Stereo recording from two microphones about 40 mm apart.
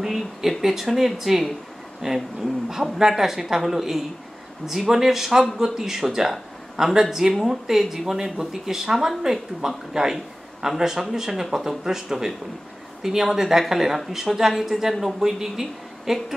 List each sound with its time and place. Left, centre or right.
0.0 s a woman's voice: centre